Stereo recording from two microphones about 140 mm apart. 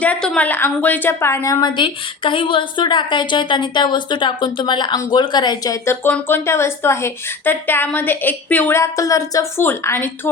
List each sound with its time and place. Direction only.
0.0 s a woman's voice: 5° left (ahead or behind)